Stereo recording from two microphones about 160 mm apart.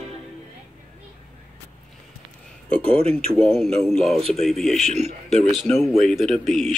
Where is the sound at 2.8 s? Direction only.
35° right (ahead or behind).